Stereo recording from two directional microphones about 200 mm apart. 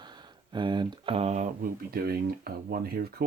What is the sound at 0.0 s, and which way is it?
Speech, 20° right (ahead or behind).